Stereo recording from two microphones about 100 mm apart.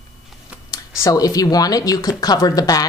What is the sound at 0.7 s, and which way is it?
Speech, 35° left (ahead or behind).